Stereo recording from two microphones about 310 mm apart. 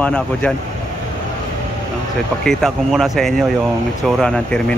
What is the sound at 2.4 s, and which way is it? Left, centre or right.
Speech, centre.